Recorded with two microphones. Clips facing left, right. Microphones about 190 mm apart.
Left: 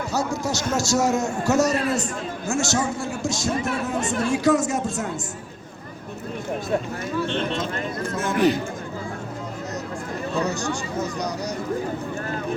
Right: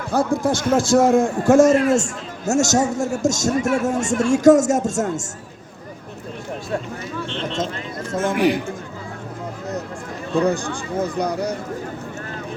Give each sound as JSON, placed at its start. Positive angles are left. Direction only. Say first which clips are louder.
{"t": 0.1, "sound": "speech", "louder": "right 9 dB", "side_deg": -55}
{"t": 8.4, "sound": "speech", "louder": "even", "side_deg": -15}
{"t": 10.4, "sound": "speech", "louder": "right 5 dB", "side_deg": -55}